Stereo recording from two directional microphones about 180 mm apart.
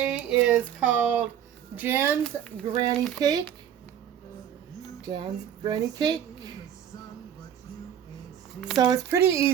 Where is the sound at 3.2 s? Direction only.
20° right (ahead or behind).